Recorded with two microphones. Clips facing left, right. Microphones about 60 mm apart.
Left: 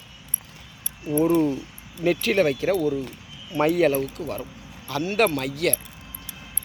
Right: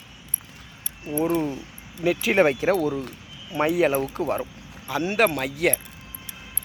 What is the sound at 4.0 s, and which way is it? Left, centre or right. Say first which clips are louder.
Speech: right 4 dB; right.